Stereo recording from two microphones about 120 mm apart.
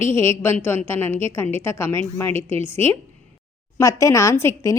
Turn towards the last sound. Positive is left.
turn(degrees=25)  # may be behind; listen again after turning